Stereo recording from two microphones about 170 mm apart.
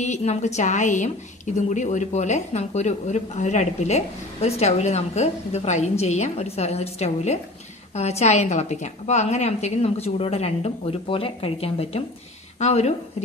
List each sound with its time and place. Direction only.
0.0 s a woman's voice: 40° left (ahead or behind)